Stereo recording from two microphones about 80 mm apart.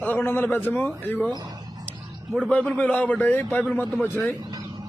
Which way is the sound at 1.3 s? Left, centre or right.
Right.